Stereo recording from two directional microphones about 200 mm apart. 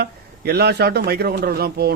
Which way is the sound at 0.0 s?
50° right (ahead or behind).